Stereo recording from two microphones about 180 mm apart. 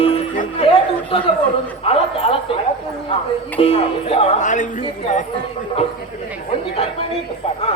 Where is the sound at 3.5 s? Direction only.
30° left (ahead or behind).